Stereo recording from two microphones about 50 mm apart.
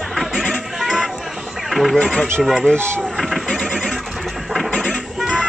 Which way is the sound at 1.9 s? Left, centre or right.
Centre.